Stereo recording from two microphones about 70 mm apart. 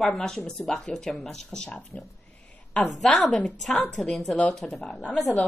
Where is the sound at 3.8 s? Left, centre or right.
Centre.